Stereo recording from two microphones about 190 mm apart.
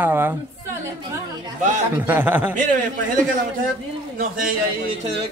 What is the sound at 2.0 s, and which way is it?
Speech, 10° right (ahead or behind).